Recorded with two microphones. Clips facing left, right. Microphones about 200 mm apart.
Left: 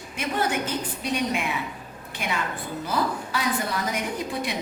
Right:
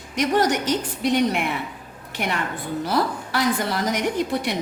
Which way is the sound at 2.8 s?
80° right.